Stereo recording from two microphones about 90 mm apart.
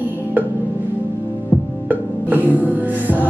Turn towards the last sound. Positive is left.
turn(degrees=-20)  # may be behind; listen again after turning